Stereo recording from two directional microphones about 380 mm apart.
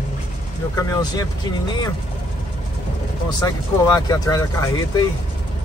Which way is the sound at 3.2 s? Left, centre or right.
Centre.